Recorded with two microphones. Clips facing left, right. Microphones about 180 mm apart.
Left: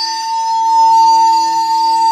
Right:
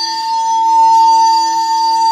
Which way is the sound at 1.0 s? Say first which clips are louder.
Even; 5° left (ahead or behind).